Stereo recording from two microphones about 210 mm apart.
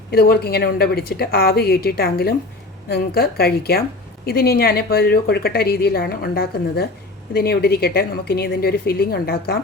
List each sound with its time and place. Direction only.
0.1 s a woman's voice: 45° left (ahead or behind)